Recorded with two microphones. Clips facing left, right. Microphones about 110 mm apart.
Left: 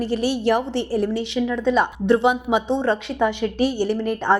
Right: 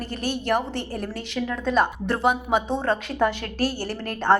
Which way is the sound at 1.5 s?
Centre (ahead or behind).